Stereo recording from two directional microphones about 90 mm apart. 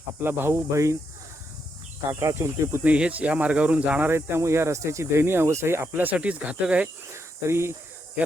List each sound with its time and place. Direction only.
0.2 s speech: 25° right (ahead or behind)
2.1 s speech: 30° right (ahead or behind)
2.8 s speech: 15° right (ahead or behind)
4.1 s speech: 30° right (ahead or behind); by 6.8 s 15° right (ahead or behind)
7.4 s speech: 30° right (ahead or behind)